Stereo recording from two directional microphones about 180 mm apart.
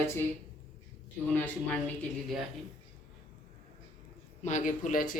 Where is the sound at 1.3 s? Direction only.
10° left (ahead or behind).